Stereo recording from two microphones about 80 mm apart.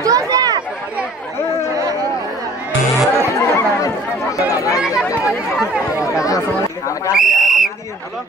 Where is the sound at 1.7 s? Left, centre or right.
Right.